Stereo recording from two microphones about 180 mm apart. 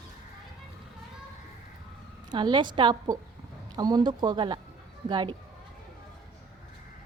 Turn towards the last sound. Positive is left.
turn(degrees=-25)  # may be behind; listen again after turning